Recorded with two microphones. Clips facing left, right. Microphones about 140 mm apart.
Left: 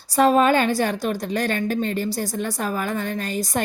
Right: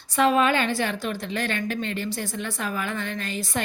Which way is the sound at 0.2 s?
40° left (ahead or behind).